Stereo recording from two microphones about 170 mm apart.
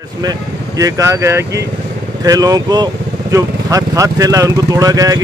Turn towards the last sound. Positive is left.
turn(degrees=-20)  # may be behind; listen again after turning